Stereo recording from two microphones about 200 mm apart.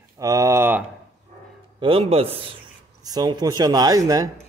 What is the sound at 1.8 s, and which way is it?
Speech, 30° right (ahead or behind).